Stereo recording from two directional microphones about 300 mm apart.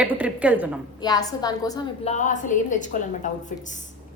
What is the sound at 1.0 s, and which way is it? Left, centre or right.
A woman's voice, centre.